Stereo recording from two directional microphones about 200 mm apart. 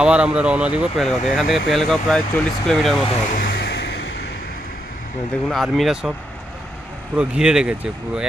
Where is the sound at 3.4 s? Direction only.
55° left (ahead or behind).